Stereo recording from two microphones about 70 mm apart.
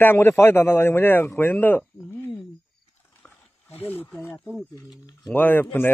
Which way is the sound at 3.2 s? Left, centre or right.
Left.